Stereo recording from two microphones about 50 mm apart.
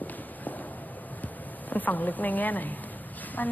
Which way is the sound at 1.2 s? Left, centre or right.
Left.